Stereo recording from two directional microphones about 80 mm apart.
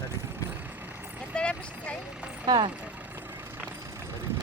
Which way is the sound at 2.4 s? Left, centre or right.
Right.